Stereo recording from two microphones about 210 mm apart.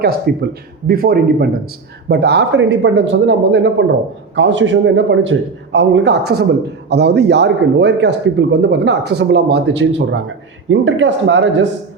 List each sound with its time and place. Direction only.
0.0 s a man's voice: 45° right (ahead or behind)